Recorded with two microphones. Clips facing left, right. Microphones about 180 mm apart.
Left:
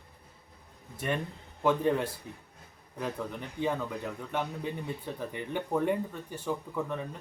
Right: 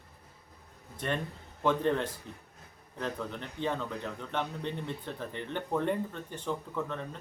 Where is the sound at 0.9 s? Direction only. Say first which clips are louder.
Left 1 dB; 10° left (ahead or behind).